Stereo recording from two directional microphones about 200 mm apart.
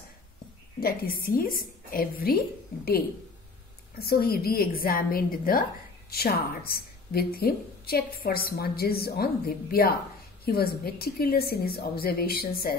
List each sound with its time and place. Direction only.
0.7 s a woman's voice: 50° left (ahead or behind)
4.0 s a woman's voice: 50° left (ahead or behind)